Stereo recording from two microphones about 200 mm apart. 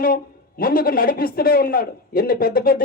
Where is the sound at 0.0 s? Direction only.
45° left (ahead or behind).